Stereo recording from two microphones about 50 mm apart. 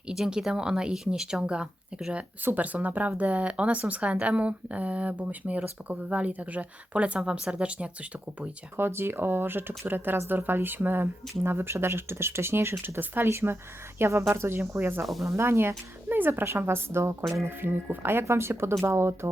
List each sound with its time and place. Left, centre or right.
0.1 s speech: centre
2.6 s speech: right
8.7 s a woman's voice: right
12.8 s speech: right
13.3 s a woman's voice: right
15.2 s a woman's voice: right
17.4 s a woman's voice: right